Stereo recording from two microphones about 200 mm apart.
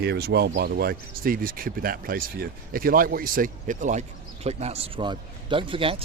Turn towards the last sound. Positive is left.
turn(degrees=-25)  # may be behind; listen again after turning